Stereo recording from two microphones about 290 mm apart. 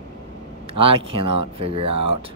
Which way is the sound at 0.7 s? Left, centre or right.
Centre.